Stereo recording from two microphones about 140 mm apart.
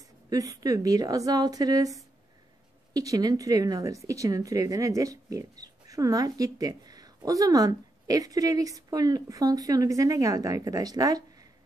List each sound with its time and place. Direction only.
0.3 s speech: 25° right (ahead or behind)